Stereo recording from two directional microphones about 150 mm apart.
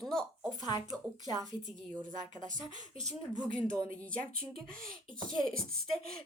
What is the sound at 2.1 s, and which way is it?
Speech, 60° right (ahead or behind).